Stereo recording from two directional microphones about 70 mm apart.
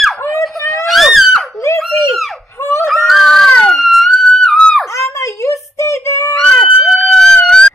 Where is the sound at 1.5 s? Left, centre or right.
Left.